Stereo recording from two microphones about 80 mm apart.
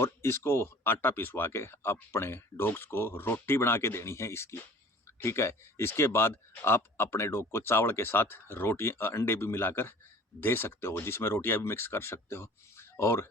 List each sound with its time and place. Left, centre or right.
0.0 s speech: left